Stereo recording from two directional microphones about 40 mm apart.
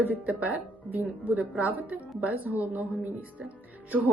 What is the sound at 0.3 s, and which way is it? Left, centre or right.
Speech, right.